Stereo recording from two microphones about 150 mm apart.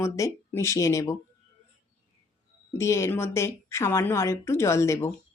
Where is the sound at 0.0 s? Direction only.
20° left (ahead or behind).